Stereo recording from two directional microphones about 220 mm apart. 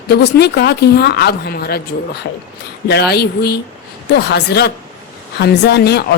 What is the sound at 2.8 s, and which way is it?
Speech, 50° left (ahead or behind).